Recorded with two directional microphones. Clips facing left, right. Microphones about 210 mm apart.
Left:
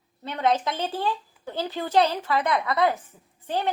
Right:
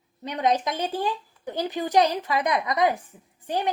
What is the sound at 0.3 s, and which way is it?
A woman's voice, 15° right (ahead or behind).